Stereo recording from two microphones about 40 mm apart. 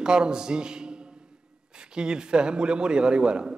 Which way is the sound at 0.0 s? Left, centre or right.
Centre.